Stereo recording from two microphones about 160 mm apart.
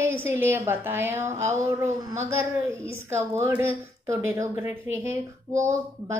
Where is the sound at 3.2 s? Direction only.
15° right (ahead or behind).